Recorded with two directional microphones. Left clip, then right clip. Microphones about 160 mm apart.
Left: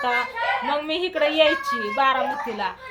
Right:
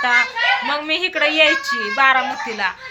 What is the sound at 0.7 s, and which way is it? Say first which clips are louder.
Speech: right 4 dB; 5° right (ahead or behind).